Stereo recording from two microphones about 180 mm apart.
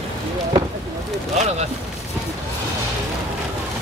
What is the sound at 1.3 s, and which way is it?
Speech, 35° right (ahead or behind).